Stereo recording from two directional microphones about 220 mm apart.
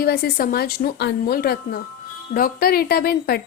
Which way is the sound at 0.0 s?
45° left (ahead or behind).